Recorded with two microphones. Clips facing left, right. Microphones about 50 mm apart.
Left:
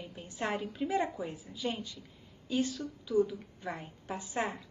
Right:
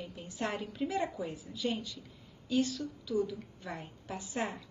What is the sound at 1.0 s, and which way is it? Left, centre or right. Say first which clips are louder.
Speech: left 3 dB; left.